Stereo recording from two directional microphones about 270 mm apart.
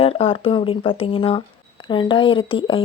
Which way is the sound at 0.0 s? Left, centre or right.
Left.